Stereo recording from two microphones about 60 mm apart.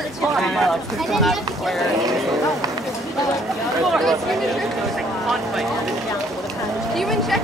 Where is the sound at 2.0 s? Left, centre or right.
Right.